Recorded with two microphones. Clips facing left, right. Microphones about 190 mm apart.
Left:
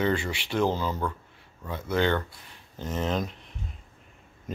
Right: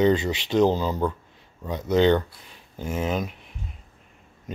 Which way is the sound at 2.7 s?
10° right (ahead or behind).